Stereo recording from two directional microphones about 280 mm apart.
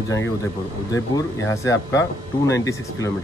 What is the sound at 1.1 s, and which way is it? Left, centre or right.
A man's voice, centre.